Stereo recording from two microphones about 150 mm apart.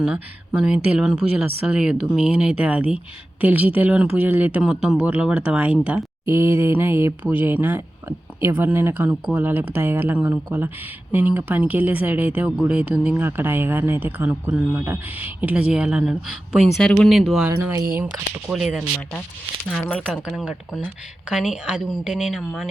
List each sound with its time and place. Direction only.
0.0 s speech: 5° right (ahead or behind)
17.5 s speech: 15° right (ahead or behind)
19.6 s speech: 10° left (ahead or behind)
20.2 s speech: 5° right (ahead or behind)